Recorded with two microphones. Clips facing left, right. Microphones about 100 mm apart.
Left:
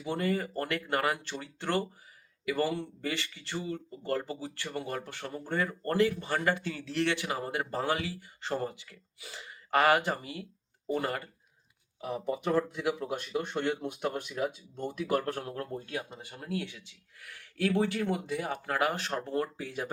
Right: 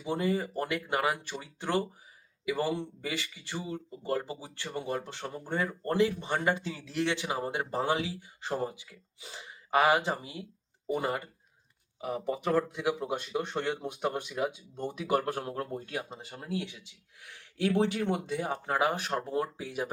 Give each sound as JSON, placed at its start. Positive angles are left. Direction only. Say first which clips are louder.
{"t": 0.0, "sound": "a man's voice", "louder": "right 1 dB", "side_deg": -15}
{"t": 12.0, "sound": "speech", "louder": "even", "side_deg": 0}
{"t": 15.4, "sound": "a man's voice", "louder": "right 2 dB", "side_deg": -25}